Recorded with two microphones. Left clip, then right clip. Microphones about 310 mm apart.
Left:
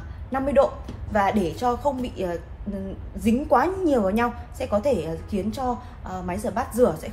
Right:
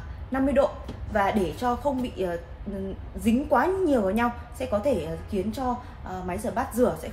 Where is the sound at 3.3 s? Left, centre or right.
Centre.